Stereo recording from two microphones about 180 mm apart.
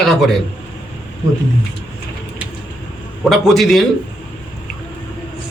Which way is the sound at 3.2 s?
Centre (ahead or behind).